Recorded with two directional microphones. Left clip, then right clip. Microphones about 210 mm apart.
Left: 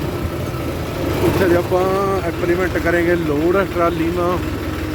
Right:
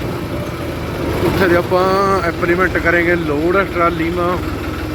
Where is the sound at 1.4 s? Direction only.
5° left (ahead or behind).